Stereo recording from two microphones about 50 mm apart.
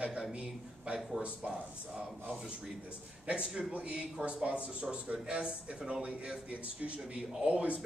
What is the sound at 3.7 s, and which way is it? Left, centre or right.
Speech, right.